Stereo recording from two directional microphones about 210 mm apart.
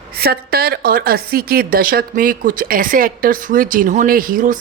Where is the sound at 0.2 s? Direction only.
45° right (ahead or behind).